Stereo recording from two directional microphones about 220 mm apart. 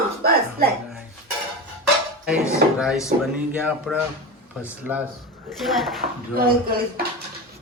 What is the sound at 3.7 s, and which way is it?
Speech, 5° right (ahead or behind).